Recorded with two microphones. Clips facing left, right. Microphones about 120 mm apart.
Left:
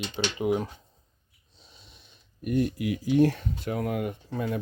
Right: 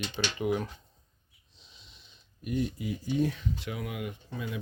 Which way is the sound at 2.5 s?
55° left (ahead or behind).